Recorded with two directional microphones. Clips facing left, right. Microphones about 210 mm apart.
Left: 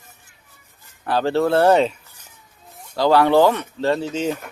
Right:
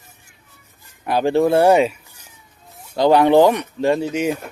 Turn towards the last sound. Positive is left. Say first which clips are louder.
# right 3 dB
turn(degrees=-10)  # may be behind; listen again after turning